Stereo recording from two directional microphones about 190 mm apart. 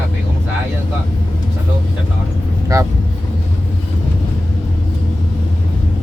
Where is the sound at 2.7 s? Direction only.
20° right (ahead or behind).